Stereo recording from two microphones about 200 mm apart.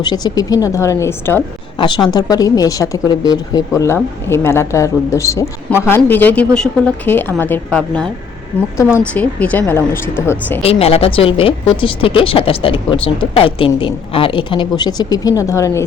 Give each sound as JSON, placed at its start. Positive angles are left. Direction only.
{"t": 0.0, "sound": "a woman's voice", "side_deg": 20}
{"t": 9.1, "sound": "a woman's voice", "side_deg": 5}
{"t": 10.6, "sound": "a woman's voice", "side_deg": 30}